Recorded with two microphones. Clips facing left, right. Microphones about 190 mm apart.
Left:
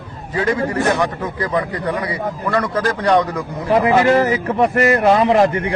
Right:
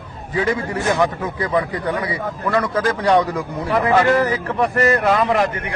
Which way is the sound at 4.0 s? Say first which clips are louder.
Left 2 dB; 20° left (ahead or behind).